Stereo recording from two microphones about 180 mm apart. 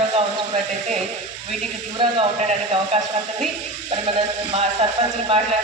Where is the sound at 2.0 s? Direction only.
30° right (ahead or behind).